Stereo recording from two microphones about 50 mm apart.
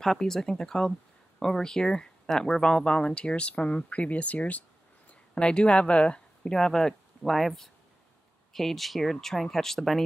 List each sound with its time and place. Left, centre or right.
0.0 s speech: centre
6.5 s speech: centre